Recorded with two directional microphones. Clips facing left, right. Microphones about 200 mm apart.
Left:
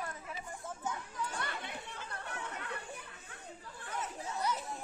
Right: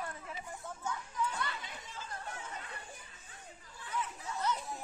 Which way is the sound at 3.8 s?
50° left (ahead or behind).